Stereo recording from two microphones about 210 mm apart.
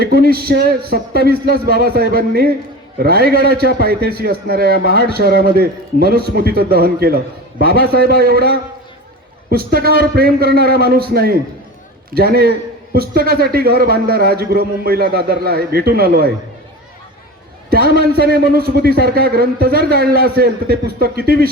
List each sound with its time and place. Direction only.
0.0 s a man's voice: 45° right (ahead or behind)
18.1 s a man's voice: 45° right (ahead or behind)